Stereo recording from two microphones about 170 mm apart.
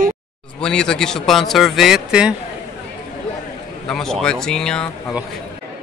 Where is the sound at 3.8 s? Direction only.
5° left (ahead or behind).